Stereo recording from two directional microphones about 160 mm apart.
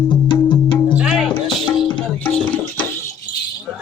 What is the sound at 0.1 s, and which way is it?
Music, 30° left (ahead or behind).